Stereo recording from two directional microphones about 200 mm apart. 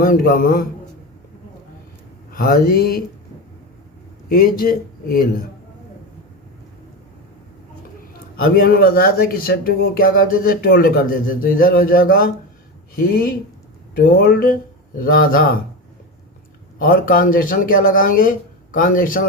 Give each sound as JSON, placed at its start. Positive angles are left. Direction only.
{"t": 0.0, "sound": "speech", "side_deg": 45}
{"t": 2.3, "sound": "speech", "side_deg": 45}
{"t": 4.3, "sound": "speech", "side_deg": 45}
{"t": 8.5, "sound": "speech", "side_deg": 45}
{"t": 16.7, "sound": "speech", "side_deg": 45}